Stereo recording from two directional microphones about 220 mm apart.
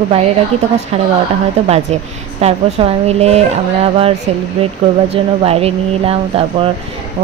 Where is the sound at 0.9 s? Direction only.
25° right (ahead or behind).